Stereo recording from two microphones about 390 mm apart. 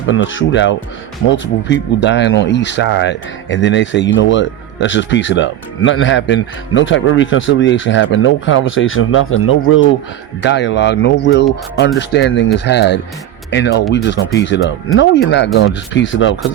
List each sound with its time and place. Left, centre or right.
0.0 s speech: left